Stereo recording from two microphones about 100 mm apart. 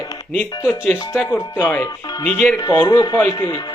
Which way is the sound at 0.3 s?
20° left (ahead or behind).